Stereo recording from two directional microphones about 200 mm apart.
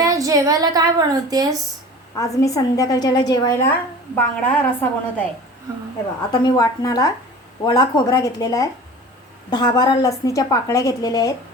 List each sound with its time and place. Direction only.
0.0 s a woman's voice: 15° right (ahead or behind)
2.1 s a woman's voice: 15° left (ahead or behind)
6.4 s a woman's voice: 20° left (ahead or behind)